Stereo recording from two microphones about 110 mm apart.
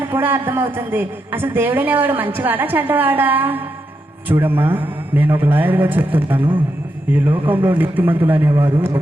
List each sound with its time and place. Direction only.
0.0 s a woman's voice: 20° right (ahead or behind)